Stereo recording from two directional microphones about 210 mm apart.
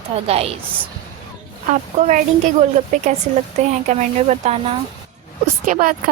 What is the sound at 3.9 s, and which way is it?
Speech, 35° right (ahead or behind).